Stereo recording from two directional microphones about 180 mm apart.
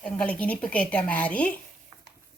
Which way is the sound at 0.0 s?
5° left (ahead or behind).